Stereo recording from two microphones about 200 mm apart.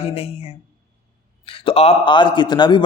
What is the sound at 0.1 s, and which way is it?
A man's voice, 30° left (ahead or behind).